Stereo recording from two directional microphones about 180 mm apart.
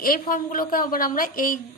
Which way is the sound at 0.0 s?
50° left (ahead or behind).